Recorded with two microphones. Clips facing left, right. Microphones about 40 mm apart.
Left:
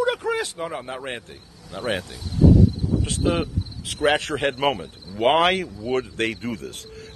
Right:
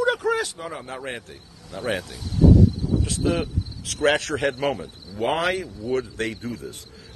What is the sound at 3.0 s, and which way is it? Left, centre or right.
Speech, left.